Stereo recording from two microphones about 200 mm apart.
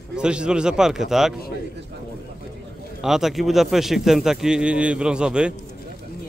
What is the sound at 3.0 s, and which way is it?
Speech, centre (ahead or behind).